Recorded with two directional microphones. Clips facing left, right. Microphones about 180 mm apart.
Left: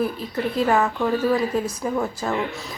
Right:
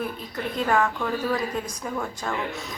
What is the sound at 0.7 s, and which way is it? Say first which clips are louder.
Speech: left 4 dB; 5° left (ahead or behind).